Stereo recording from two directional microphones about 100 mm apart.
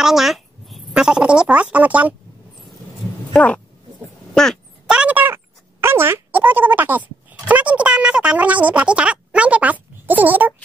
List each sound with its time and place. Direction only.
0.0 s speech: 5° right (ahead or behind)
3.3 s speech: 10° left (ahead or behind)
4.8 s speech: 10° right (ahead or behind)